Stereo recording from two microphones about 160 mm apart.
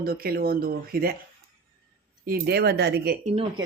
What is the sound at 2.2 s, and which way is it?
Speech, 75° right (ahead or behind).